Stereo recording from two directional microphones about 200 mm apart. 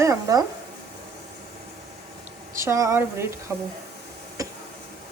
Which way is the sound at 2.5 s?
15° right (ahead or behind).